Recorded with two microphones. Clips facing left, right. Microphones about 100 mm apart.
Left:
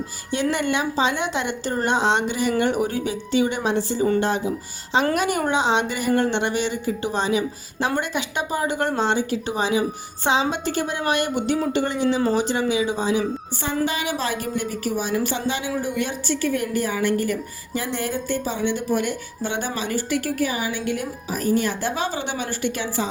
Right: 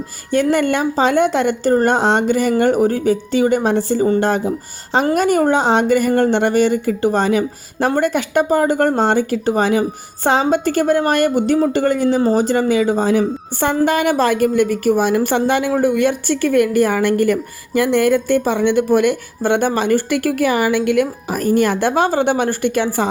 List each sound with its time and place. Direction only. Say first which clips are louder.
0.5 s a woman's voice: right 6 dB; 45° right (ahead or behind)